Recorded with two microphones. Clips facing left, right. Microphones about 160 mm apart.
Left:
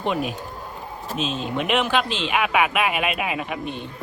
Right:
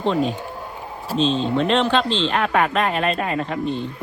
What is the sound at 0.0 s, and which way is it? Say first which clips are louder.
Speech: right 4 dB; 10° left (ahead or behind).